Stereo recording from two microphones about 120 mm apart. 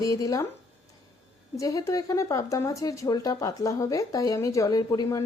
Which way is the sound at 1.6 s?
30° left (ahead or behind).